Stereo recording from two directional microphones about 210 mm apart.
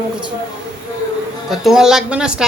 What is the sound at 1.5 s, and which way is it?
Speech, centre (ahead or behind).